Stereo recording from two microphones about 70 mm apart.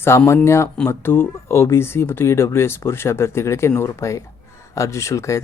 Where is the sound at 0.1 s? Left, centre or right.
Left.